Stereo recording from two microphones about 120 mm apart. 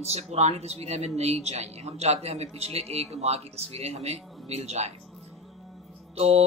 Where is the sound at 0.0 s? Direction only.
60° right (ahead or behind).